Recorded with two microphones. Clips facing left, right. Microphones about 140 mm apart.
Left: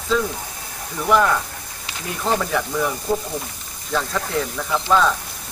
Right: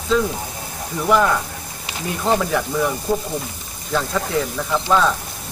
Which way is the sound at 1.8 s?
15° right (ahead or behind).